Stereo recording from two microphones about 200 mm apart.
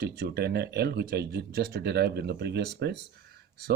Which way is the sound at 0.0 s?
55° right (ahead or behind).